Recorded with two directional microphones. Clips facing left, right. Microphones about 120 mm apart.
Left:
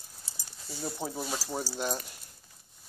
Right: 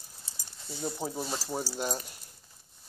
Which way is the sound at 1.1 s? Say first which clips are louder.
Even; 10° left (ahead or behind).